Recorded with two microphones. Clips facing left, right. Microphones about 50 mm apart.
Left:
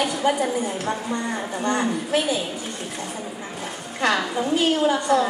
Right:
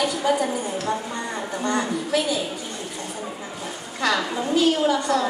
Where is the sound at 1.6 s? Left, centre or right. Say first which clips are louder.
Left 1 dB; left.